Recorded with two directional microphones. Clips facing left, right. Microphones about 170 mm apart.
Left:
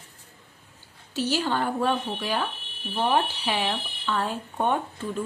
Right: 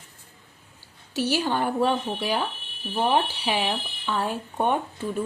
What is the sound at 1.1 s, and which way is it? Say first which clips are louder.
Speech: right 1 dB; 15° right (ahead or behind).